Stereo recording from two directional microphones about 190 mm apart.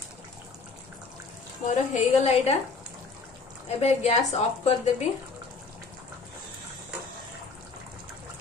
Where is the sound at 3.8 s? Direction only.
35° left (ahead or behind).